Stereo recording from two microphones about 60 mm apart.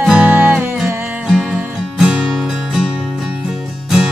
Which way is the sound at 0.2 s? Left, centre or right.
Right.